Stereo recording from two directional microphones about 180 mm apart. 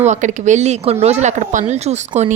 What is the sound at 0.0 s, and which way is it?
Speech, 40° right (ahead or behind).